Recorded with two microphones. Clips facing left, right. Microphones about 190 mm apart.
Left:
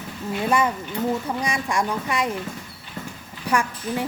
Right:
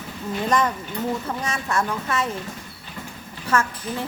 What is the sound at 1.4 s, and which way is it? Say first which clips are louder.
Speech: left 1 dB; 15° left (ahead or behind).